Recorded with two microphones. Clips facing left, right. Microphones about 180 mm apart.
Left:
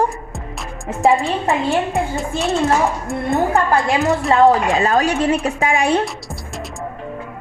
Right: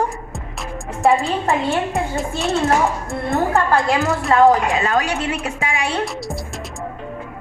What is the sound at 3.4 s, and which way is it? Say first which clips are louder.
Speech: even; 20° left (ahead or behind).